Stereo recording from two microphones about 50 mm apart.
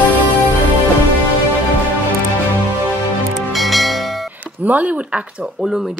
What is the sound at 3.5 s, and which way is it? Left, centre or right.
Bell, centre.